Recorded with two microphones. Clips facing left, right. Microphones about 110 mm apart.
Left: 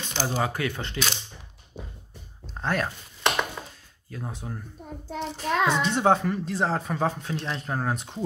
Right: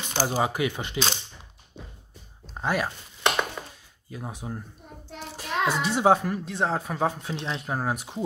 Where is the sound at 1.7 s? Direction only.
25° right (ahead or behind).